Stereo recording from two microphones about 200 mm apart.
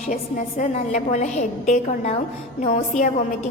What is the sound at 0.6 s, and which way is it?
A woman's voice, 40° left (ahead or behind).